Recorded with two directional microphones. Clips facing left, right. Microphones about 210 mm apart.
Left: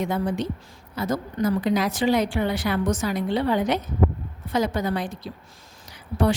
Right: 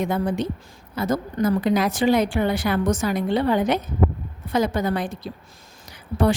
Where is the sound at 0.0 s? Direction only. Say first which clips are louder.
Right 2 dB; 50° right (ahead or behind).